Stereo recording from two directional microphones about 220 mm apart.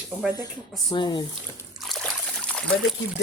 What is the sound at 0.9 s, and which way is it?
Speech, 20° left (ahead or behind).